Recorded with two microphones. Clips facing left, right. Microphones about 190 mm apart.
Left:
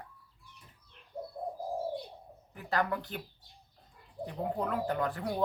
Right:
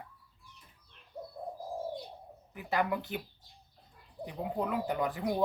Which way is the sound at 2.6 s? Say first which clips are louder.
Right 1 dB; 15° right (ahead or behind).